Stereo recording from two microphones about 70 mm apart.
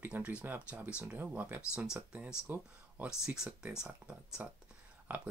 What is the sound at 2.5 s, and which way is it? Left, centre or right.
Speech, right.